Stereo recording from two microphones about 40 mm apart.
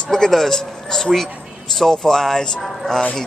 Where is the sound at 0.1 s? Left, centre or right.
Centre.